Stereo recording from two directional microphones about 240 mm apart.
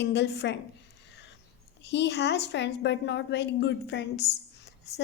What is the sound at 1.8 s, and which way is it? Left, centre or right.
A woman's voice, left.